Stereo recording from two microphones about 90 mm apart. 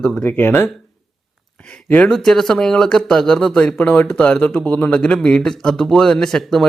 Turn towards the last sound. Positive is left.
turn(degrees=5)  # may be behind; listen again after turning